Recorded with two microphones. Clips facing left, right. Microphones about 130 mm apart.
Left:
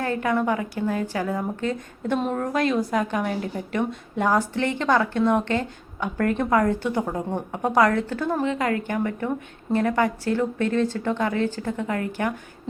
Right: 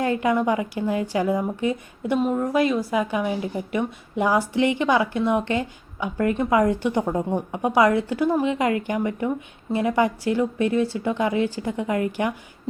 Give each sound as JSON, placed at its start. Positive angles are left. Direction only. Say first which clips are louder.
{"t": 0.0, "sound": "a woman's voice", "louder": "right 2 dB", "side_deg": -15}